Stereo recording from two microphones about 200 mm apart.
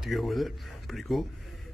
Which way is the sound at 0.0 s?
Centre (ahead or behind).